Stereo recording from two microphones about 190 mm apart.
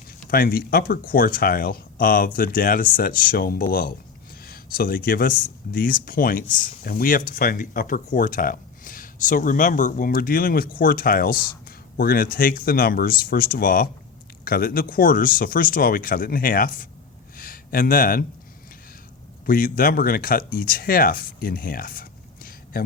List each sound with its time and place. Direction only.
0.3 s speech: 50° left (ahead or behind)
17.3 s a sound: 45° left (ahead or behind)
19.5 s speech: 50° left (ahead or behind)